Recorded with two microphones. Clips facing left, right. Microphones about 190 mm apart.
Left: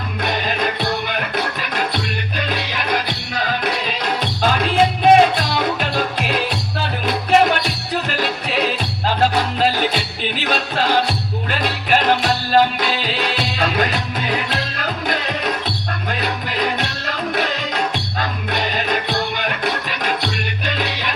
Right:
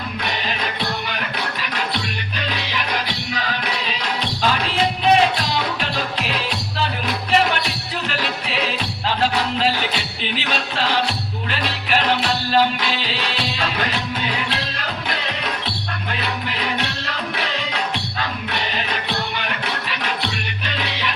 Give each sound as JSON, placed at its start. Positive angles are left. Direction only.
{"t": 0.3, "sound": "music", "side_deg": 45}